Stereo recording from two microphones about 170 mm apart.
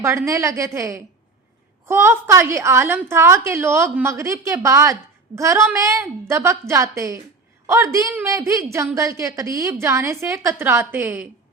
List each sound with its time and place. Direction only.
0.0 s a woman's voice: 15° right (ahead or behind)